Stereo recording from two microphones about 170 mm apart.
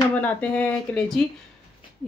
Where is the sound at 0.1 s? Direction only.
10° left (ahead or behind).